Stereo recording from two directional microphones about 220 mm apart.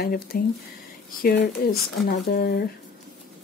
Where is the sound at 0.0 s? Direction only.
45° left (ahead or behind).